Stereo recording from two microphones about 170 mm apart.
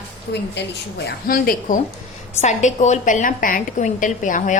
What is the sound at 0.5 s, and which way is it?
Speech, 90° left.